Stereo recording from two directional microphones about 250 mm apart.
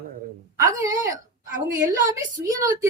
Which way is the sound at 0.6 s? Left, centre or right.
Centre.